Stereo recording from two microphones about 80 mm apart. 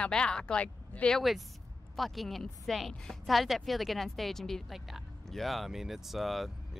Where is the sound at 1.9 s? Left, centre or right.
Centre.